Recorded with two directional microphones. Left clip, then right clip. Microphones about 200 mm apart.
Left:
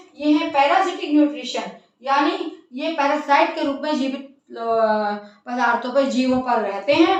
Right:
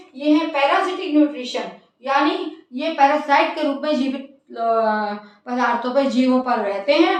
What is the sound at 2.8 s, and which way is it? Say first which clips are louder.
A woman's voice: right 4 dB; 5° left (ahead or behind).